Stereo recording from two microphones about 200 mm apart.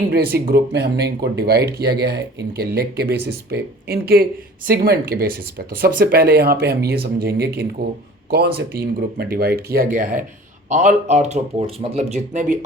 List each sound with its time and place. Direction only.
0.1 s speech: 50° right (ahead or behind)